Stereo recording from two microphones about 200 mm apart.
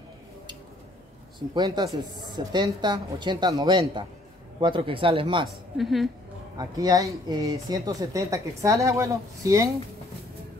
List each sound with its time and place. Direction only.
1.5 s a woman's voice: 20° right (ahead or behind)
5.8 s a woman's voice: centre (ahead or behind)
6.6 s speech: 15° right (ahead or behind)